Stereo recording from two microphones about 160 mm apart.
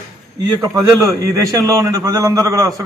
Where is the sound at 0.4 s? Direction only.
20° right (ahead or behind).